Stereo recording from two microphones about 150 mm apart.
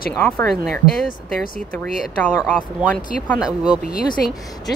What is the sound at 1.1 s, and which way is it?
Speech, 70° left (ahead or behind).